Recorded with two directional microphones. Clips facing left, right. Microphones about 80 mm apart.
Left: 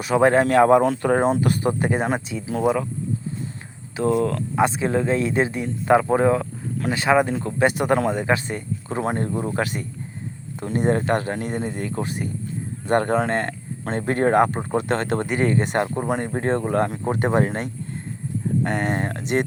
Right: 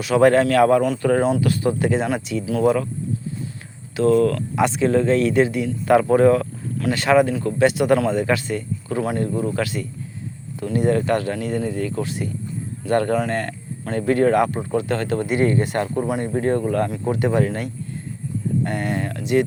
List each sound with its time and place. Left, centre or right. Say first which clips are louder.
0.0 s speech: right 2 dB; left
3.9 s speech: right 4 dB; centre
5.9 s speech: right 3 dB; left
14.8 s speech: even; left
16.0 s speech: right 2 dB; left